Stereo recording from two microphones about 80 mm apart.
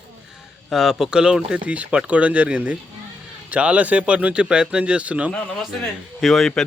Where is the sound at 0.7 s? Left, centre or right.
Centre.